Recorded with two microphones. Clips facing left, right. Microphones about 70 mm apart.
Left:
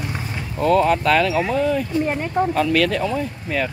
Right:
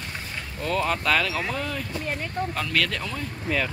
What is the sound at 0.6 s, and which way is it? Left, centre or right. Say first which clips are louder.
Speech: left 9 dB; centre.